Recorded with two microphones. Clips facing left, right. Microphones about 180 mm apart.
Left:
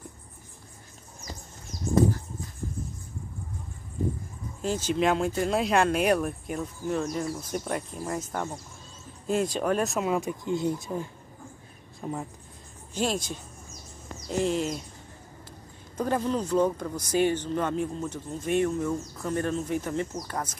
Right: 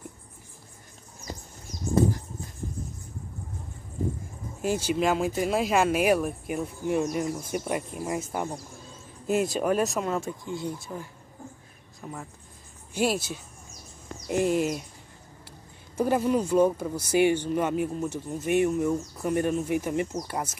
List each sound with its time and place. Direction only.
4.6 s speech: 10° right (ahead or behind)
10.2 s speech: 20° left (ahead or behind)
12.9 s speech: 10° right (ahead or behind)
16.0 s speech: 10° right (ahead or behind)